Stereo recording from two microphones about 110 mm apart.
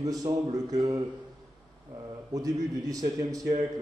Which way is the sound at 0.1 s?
35° right (ahead or behind).